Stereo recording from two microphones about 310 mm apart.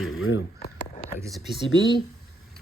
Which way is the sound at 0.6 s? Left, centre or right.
Centre.